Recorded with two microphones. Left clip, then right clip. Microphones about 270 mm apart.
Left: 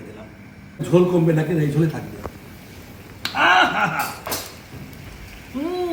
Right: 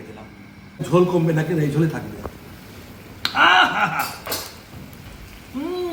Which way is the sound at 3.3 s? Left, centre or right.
Centre.